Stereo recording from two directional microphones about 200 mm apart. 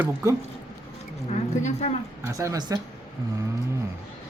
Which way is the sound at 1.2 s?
35° left (ahead or behind).